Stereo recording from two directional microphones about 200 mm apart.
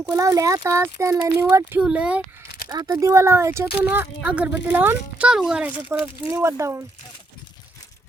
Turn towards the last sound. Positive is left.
turn(degrees=-15)  # may be behind; listen again after turning